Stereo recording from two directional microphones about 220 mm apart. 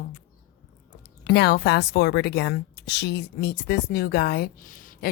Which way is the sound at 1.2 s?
50° left (ahead or behind).